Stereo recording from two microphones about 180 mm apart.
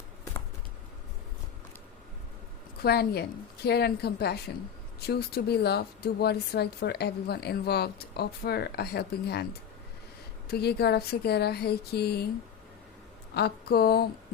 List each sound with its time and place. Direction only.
2.8 s speech: 60° left (ahead or behind)
13.3 s speech: 60° left (ahead or behind)